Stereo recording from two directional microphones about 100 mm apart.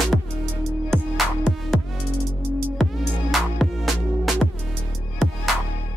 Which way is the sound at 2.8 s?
5° left (ahead or behind).